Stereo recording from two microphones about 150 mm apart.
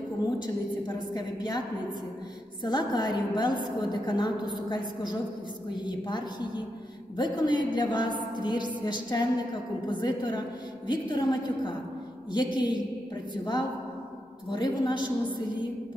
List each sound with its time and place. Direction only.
1.1 s a woman's voice: 25° left (ahead or behind)
2.6 s a woman's voice: 30° left (ahead or behind)